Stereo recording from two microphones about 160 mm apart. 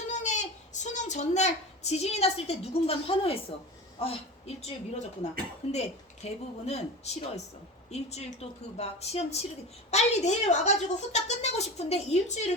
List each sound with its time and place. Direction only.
0.1 s a sound: 50° left (ahead or behind)
4.0 s speech: 40° left (ahead or behind)
5.7 s speech: 40° left (ahead or behind)